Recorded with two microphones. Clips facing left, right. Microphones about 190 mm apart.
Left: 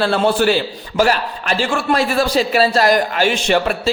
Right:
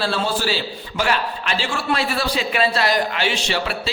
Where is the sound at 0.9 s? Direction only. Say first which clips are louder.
Left 6 dB; 45° left (ahead or behind).